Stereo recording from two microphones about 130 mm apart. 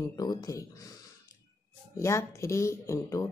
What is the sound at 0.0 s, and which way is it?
Speech, 30° left (ahead or behind).